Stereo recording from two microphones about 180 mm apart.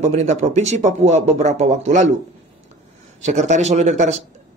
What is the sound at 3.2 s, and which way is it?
Speech, 40° right (ahead or behind).